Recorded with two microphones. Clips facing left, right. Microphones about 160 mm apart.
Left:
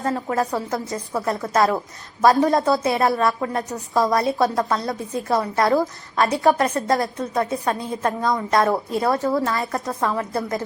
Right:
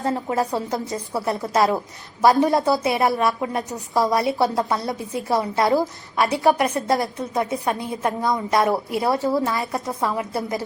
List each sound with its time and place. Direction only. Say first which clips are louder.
0.0 s a woman's voice: even; 20° right (ahead or behind)